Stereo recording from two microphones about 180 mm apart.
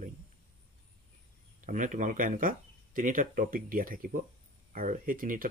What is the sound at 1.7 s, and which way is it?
Speech, 45° right (ahead or behind).